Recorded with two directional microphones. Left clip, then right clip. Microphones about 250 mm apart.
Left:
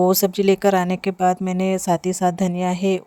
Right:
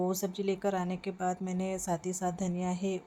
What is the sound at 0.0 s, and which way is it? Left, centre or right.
Speech, left.